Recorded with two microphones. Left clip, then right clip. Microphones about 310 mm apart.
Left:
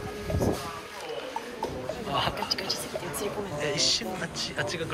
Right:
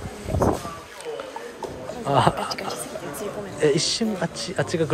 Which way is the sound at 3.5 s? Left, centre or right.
Right.